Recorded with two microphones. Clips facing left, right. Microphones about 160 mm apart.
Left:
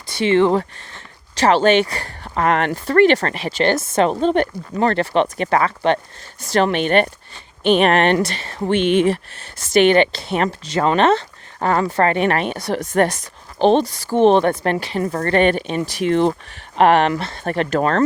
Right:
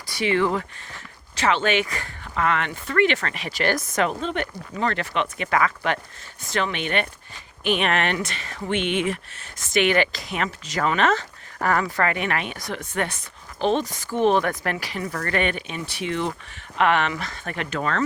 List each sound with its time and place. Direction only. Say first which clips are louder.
0.1 s speech: left 7 dB; 25° left (ahead or behind)
13.6 s speech: left 8 dB; 30° left (ahead or behind)